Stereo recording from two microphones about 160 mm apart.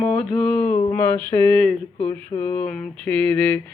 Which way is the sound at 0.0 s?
5° left (ahead or behind).